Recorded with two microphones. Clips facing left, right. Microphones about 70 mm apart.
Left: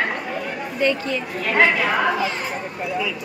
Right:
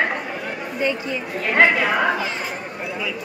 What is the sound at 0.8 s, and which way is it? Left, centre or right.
Speech, centre.